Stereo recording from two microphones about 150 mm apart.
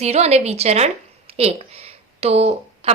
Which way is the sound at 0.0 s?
45° right (ahead or behind).